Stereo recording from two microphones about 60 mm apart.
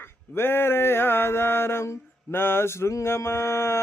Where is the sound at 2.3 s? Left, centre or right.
Left.